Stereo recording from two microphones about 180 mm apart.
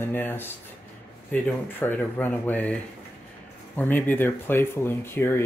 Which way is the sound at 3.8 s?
10° left (ahead or behind).